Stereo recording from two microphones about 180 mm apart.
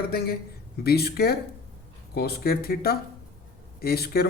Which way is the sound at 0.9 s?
60° left (ahead or behind).